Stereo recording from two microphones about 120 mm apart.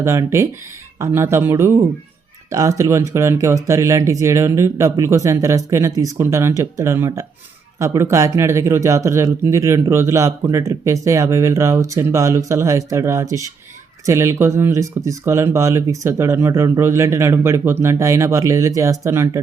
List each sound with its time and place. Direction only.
0.0 s a man's voice: 25° right (ahead or behind)